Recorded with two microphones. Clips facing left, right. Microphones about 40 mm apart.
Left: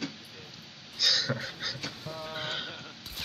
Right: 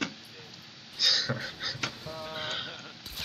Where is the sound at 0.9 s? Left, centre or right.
Centre.